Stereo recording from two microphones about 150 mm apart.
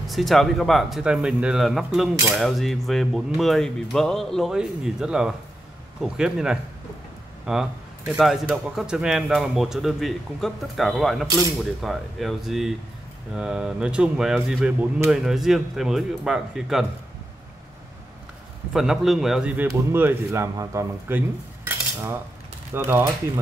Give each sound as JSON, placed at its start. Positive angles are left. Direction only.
{"t": 0.1, "sound": "speech", "side_deg": 0}
{"t": 18.7, "sound": "speech", "side_deg": -5}
{"t": 21.6, "sound": "cutlery", "side_deg": -15}
{"t": 22.8, "sound": "speech", "side_deg": -15}